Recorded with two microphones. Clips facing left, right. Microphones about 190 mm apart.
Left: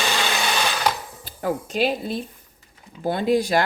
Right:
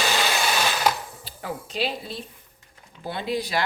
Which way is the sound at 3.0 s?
45° left (ahead or behind).